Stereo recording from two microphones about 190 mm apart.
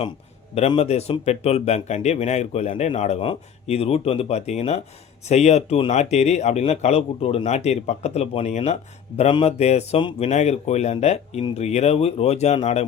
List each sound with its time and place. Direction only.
0.7 s a man's voice: 35° left (ahead or behind)